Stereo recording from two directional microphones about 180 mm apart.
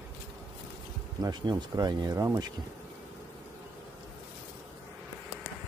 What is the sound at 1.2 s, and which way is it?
Speech, 25° right (ahead or behind).